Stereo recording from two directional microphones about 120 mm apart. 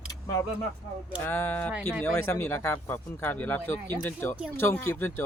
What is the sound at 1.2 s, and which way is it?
Speech, 20° left (ahead or behind).